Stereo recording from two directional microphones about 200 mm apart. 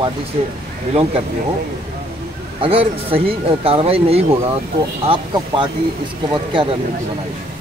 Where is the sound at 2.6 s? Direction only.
30° right (ahead or behind).